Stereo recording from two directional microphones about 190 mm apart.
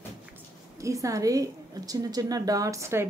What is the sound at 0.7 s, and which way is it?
A woman's voice, 15° right (ahead or behind).